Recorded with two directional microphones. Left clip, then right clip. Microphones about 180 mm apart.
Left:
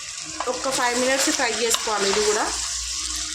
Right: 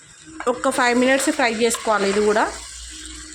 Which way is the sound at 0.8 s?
55° right (ahead or behind).